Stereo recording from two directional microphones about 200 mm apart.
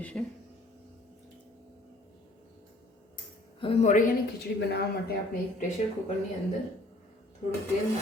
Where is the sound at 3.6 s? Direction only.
30° left (ahead or behind).